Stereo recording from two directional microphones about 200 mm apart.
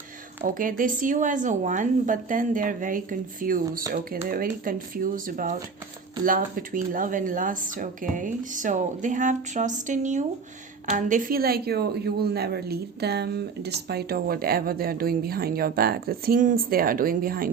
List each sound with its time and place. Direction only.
0.4 s speech: 45° right (ahead or behind)